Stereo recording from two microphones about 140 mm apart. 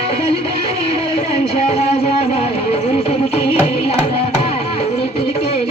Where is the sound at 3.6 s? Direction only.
45° left (ahead or behind).